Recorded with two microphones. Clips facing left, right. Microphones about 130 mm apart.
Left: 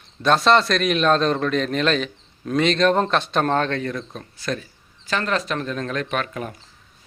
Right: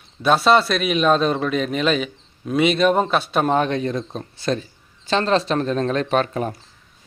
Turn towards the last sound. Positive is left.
turn(degrees=-35)  # may be behind; listen again after turning